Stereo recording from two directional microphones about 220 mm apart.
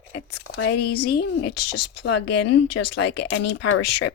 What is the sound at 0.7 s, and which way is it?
Speech, 45° left (ahead or behind).